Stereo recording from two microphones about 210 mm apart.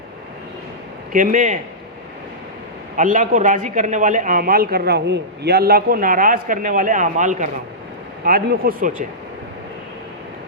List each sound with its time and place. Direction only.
1.1 s a man's voice: 40° right (ahead or behind)
2.9 s a man's voice: 40° right (ahead or behind)
8.2 s speech: 45° right (ahead or behind)